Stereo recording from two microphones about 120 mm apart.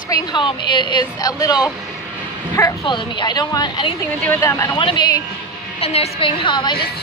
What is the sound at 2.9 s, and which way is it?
A woman's voice, 35° left (ahead or behind).